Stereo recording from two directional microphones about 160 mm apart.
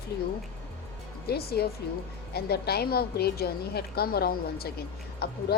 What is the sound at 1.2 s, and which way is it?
A woman's voice, 80° left.